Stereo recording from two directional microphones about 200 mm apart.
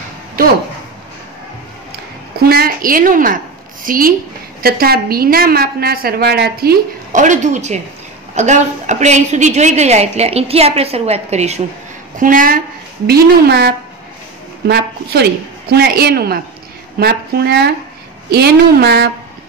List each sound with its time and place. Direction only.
0.4 s speech: 45° right (ahead or behind)
2.3 s a sound: 50° right (ahead or behind)
3.8 s a woman's voice: 45° right (ahead or behind)
13.0 s a woman's voice: 55° right (ahead or behind)